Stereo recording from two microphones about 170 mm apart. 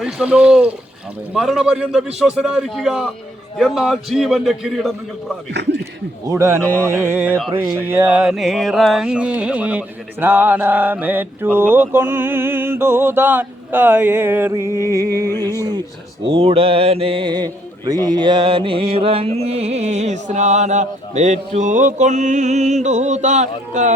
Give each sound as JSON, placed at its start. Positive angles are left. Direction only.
{"t": 0.0, "sound": "a man's voice", "side_deg": -5}
{"t": 6.2, "sound": "a sound", "side_deg": -15}
{"t": 16.2, "sound": "mantra", "side_deg": -30}